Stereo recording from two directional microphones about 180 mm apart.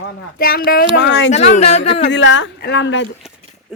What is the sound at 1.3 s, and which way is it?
Speech, 35° left (ahead or behind).